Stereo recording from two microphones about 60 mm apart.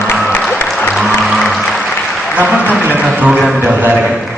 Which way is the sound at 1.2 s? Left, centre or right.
Centre.